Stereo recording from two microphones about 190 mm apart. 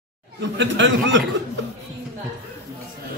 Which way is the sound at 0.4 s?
75° right (ahead or behind).